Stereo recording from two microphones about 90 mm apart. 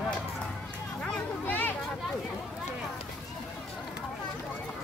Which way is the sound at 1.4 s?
20° left (ahead or behind).